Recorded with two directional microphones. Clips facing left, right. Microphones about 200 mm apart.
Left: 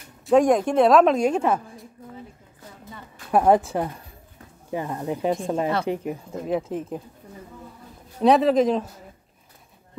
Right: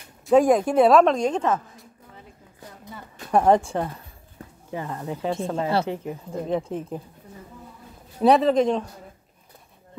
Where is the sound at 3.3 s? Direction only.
5° left (ahead or behind).